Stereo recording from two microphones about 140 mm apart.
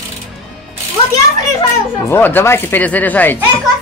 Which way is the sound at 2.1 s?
15° left (ahead or behind).